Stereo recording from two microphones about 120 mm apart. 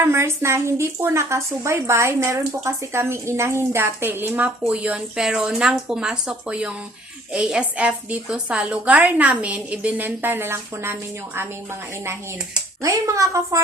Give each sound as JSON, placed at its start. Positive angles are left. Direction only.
{"t": 0.0, "sound": "a woman's voice", "side_deg": -20}